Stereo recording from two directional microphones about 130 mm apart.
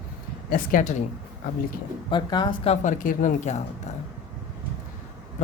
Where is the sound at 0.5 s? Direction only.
80° left.